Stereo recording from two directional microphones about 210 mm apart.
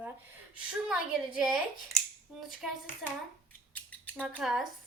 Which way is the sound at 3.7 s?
5° left (ahead or behind).